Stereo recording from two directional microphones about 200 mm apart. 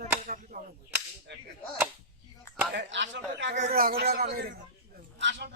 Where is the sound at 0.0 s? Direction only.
45° right (ahead or behind).